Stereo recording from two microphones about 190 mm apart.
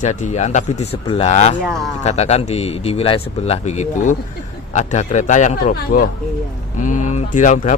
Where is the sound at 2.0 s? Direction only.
35° left (ahead or behind).